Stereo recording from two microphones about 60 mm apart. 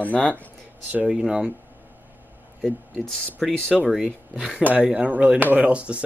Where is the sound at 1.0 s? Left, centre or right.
Centre.